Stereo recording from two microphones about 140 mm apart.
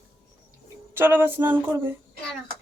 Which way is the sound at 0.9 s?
15° right (ahead or behind).